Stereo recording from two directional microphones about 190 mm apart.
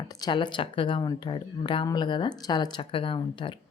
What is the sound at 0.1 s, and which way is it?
A woman's voice, 20° left (ahead or behind).